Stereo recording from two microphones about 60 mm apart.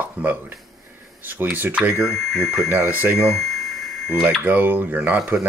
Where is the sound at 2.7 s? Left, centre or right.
Right.